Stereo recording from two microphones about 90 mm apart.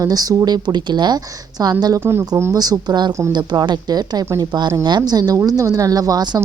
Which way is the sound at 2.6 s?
50° right (ahead or behind).